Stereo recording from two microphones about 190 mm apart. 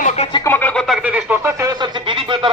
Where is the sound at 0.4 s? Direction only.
10° left (ahead or behind).